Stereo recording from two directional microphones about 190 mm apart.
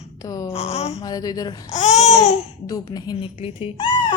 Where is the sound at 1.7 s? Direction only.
35° left (ahead or behind).